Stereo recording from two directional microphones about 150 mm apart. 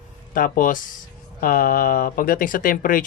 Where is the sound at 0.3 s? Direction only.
65° left (ahead or behind).